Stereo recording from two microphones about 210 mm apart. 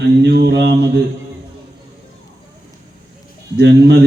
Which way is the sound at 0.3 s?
50° right (ahead or behind).